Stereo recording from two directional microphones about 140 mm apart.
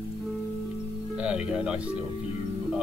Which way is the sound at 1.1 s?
5° right (ahead or behind).